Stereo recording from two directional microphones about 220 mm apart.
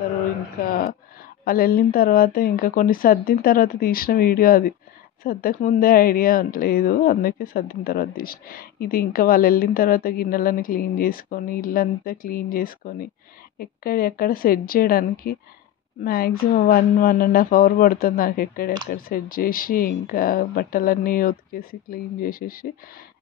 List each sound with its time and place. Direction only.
0.7 s a woman's voice: 40° left (ahead or behind)